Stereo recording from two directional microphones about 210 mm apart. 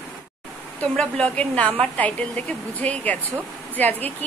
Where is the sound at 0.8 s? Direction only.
5° left (ahead or behind).